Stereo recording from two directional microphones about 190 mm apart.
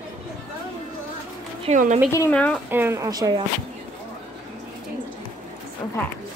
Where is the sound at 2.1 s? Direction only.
10° left (ahead or behind).